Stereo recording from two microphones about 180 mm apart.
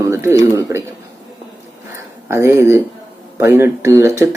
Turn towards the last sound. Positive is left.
turn(degrees=-15)  # may be behind; listen again after turning